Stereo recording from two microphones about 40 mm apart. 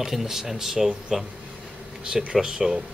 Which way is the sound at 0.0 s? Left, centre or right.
Centre.